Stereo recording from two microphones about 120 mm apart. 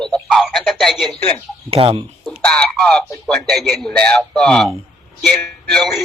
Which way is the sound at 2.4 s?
10° left (ahead or behind).